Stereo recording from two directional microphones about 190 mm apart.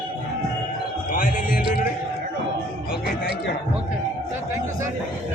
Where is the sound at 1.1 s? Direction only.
45° left (ahead or behind).